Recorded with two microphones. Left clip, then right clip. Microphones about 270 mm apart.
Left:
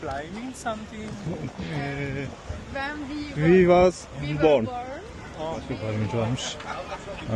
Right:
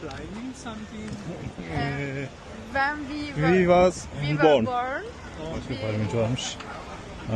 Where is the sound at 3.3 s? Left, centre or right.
Centre.